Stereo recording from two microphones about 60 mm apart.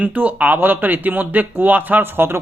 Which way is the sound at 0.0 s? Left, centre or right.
Right.